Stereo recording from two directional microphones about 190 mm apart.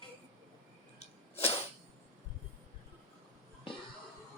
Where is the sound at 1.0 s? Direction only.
30° left (ahead or behind).